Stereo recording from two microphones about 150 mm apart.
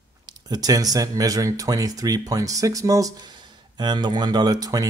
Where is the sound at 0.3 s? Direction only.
25° right (ahead or behind).